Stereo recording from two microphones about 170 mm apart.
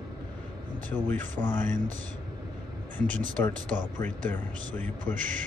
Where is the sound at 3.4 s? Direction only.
10° left (ahead or behind).